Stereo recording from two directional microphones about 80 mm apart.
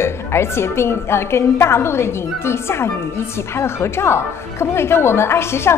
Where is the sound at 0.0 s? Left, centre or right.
Left.